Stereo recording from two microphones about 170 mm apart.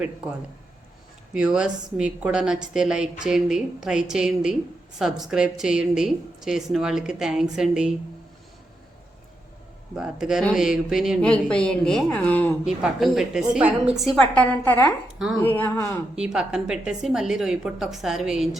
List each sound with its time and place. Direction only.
1.3 s a woman's voice: 5° right (ahead or behind)
10.0 s a woman's voice: 5° right (ahead or behind)
12.6 s a woman's voice: centre (ahead or behind); by 16.0 s 15° left (ahead or behind)
16.1 s a woman's voice: 5° right (ahead or behind)